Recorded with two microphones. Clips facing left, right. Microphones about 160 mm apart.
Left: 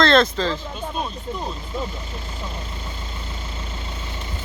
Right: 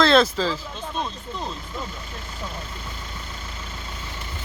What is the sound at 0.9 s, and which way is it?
Speech, 10° left (ahead or behind).